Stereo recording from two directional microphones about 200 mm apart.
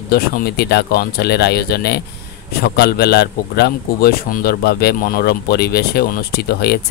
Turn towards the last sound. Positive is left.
turn(degrees=55)  # may be behind; listen again after turning